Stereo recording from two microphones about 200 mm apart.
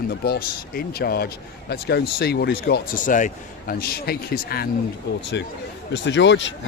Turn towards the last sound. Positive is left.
turn(degrees=65)  # may be behind; listen again after turning